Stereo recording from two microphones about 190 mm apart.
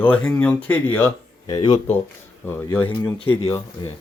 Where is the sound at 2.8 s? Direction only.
25° left (ahead or behind).